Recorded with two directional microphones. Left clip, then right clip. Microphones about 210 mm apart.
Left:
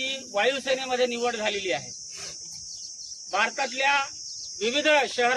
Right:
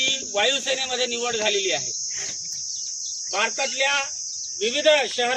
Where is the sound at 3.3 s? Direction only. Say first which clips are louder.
Right 1 dB; 25° right (ahead or behind).